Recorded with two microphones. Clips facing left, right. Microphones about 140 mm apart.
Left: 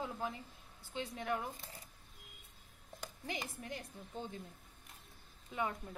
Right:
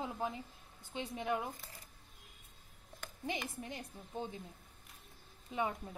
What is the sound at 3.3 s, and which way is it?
A woman's voice, 20° right (ahead or behind).